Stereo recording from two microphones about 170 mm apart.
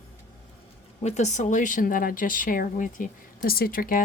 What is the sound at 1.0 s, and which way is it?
Speech, 40° left (ahead or behind).